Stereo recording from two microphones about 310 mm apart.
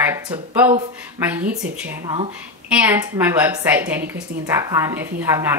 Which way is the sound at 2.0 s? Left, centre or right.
Centre.